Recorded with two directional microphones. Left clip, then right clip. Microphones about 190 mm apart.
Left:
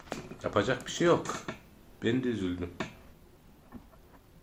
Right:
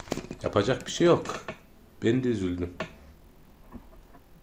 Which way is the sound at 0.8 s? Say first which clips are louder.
Right 4 dB; 35° right (ahead or behind).